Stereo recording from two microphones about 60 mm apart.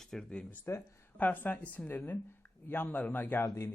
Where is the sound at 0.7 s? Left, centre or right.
Left.